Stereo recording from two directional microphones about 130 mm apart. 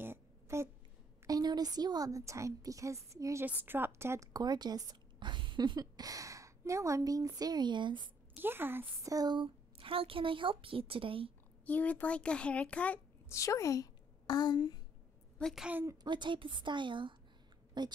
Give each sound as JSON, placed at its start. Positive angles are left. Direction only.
{"t": 0.0, "sound": "a sound", "side_deg": -20}
{"t": 1.2, "sound": "speech", "side_deg": -30}
{"t": 8.4, "sound": "a woman's voice", "side_deg": -15}
{"t": 9.1, "sound": "a woman's voice", "side_deg": -30}
{"t": 11.6, "sound": "a child's voice", "side_deg": 10}
{"t": 13.3, "sound": "a woman's voice", "side_deg": 25}
{"t": 15.3, "sound": "a sound", "side_deg": 5}
{"t": 15.6, "sound": "a woman's voice", "side_deg": -15}
{"t": 16.0, "sound": "a woman's voice", "side_deg": -35}